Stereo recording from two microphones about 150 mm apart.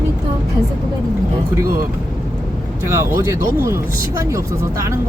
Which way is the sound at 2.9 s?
20° right (ahead or behind).